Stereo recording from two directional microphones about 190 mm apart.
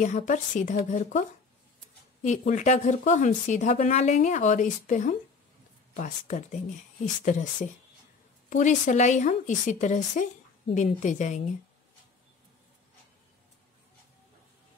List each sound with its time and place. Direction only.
0.0 s speech: 40° left (ahead or behind)
2.2 s speech: 40° left (ahead or behind)